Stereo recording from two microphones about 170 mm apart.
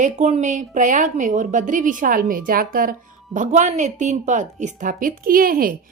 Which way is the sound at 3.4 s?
45° right (ahead or behind).